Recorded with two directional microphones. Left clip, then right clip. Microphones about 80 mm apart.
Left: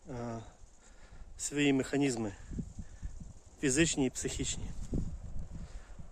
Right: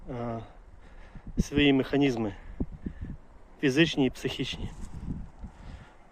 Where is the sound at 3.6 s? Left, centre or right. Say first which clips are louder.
Right 6 dB; left.